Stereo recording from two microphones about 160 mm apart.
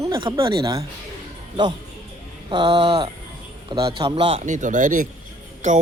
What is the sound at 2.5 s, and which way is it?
Speech, 25° right (ahead or behind).